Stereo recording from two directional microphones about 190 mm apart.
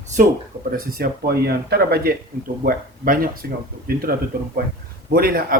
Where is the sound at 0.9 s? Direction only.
50° right (ahead or behind).